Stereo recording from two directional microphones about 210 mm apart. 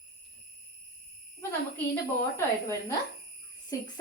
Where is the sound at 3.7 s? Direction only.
15° left (ahead or behind).